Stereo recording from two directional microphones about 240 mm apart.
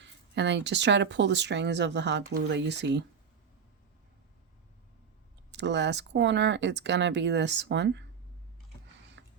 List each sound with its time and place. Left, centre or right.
0.0 s speech: right
5.5 s speech: right
9.2 s a sound: right